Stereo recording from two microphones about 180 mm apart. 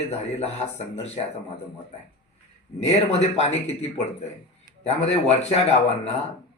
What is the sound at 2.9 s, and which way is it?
A man's voice, 35° left (ahead or behind).